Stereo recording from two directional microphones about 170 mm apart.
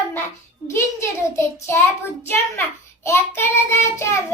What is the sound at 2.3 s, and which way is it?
Child singing, 15° left (ahead or behind).